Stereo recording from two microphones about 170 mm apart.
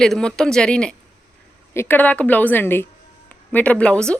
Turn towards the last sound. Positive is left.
turn(degrees=5)  # may be behind; listen again after turning